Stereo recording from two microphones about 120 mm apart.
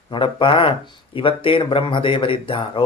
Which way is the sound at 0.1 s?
45° left (ahead or behind).